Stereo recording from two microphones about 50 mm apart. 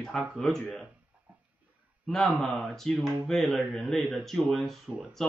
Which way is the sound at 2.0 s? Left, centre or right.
Centre.